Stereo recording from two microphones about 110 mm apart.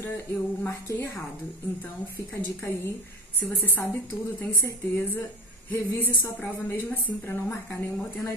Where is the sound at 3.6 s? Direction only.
20° left (ahead or behind).